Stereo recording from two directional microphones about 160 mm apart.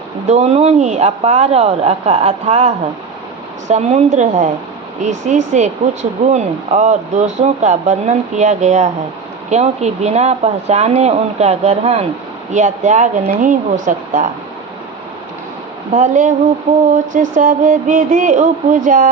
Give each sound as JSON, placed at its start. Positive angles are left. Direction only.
{"t": 0.3, "sound": "speech", "side_deg": -45}
{"t": 15.9, "sound": "speech", "side_deg": -50}
{"t": 16.9, "sound": "music", "side_deg": -55}